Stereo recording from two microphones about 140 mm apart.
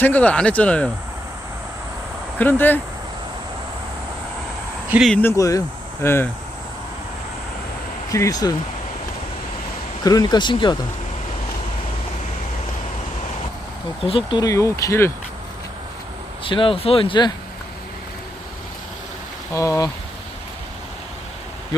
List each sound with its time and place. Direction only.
0.0 s speech: 10° left (ahead or behind)
2.4 s speech: 15° left (ahead or behind)
5.0 s speech: 10° left (ahead or behind)
5.4 s speech: 25° left (ahead or behind)
8.1 s speech: 25° left (ahead or behind)
10.0 s speech: 25° left (ahead or behind)
14.0 s speech: 40° left (ahead or behind); by 15.1 s 20° left (ahead or behind)
16.4 s speech: 40° left (ahead or behind)
19.5 s speech: 20° left (ahead or behind)